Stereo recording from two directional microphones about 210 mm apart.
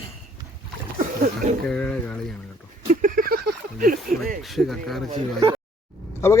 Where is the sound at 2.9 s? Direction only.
40° right (ahead or behind).